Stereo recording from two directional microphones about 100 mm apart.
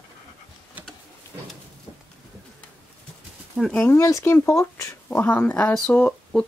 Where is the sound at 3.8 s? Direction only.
25° left (ahead or behind).